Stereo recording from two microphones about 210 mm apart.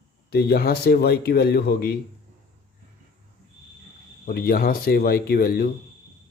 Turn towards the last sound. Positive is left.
turn(degrees=45)  # may be behind; listen again after turning